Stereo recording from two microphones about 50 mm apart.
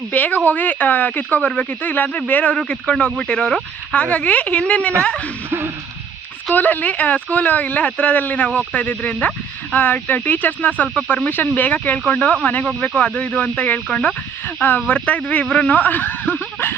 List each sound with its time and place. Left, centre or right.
0.1 s speech: left
2.6 s speech: centre
3.9 s speech: left
5.5 s a sound: right
6.5 s speech: left
13.7 s speech: left